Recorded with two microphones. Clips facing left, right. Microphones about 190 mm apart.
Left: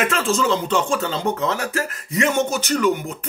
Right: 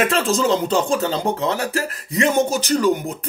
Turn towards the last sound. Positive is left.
turn(degrees=-35)  # may be behind; listen again after turning